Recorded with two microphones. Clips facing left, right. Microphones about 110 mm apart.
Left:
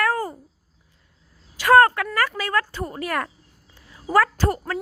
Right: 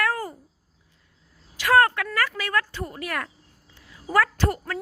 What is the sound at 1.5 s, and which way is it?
A woman's voice, 40° left (ahead or behind).